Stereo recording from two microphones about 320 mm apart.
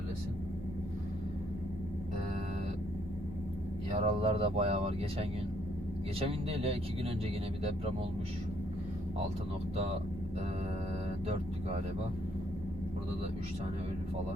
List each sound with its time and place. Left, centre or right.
3.9 s speech: centre